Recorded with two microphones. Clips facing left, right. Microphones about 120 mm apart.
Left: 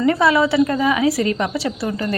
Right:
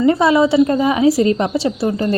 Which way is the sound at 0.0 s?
25° right (ahead or behind).